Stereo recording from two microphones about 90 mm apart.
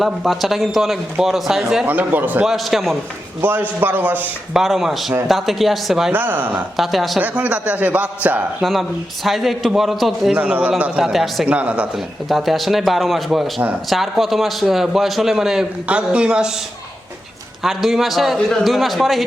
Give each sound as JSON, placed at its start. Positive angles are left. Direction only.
{"t": 0.0, "sound": "a man's voice", "side_deg": 0}
{"t": 1.9, "sound": "a man's voice", "side_deg": -20}
{"t": 2.4, "sound": "a man's voice", "side_deg": 0}
{"t": 3.4, "sound": "a man's voice", "side_deg": -20}
{"t": 4.5, "sound": "a man's voice", "side_deg": 0}
{"t": 6.1, "sound": "a man's voice", "side_deg": -20}
{"t": 6.7, "sound": "a man's voice", "side_deg": 0}
{"t": 7.2, "sound": "a man's voice", "side_deg": -15}
{"t": 8.6, "sound": "a man's voice", "side_deg": 0}
{"t": 10.3, "sound": "a man's voice", "side_deg": -15}
{"t": 11.4, "sound": "a man's voice", "side_deg": -15}
{"t": 11.9, "sound": "a man's voice", "side_deg": 0}
{"t": 17.6, "sound": "a man's voice", "side_deg": 0}